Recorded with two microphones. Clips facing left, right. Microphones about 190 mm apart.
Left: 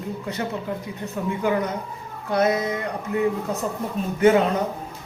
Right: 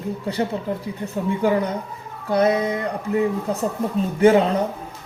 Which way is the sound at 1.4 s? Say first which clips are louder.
Right 3 dB; 30° right (ahead or behind).